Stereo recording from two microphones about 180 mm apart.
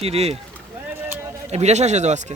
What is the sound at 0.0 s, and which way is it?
Speech, 35° right (ahead or behind).